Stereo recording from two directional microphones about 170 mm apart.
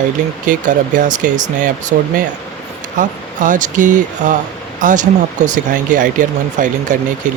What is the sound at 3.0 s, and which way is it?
Speech, 50° right (ahead or behind).